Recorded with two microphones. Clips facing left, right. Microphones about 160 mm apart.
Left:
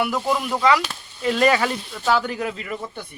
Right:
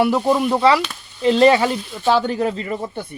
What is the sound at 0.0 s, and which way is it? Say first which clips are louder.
Speech: right 6 dB; 30° right (ahead or behind).